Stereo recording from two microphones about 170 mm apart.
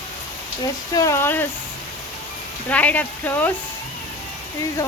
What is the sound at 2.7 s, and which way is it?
Speech, 10° left (ahead or behind).